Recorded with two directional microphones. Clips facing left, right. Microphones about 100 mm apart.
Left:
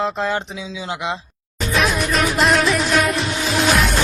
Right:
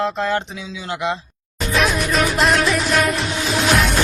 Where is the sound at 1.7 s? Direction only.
Centre (ahead or behind).